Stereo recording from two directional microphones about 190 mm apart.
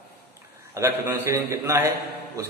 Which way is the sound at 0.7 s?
15° right (ahead or behind).